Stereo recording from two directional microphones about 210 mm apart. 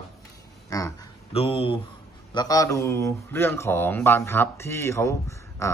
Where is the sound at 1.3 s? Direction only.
25° left (ahead or behind).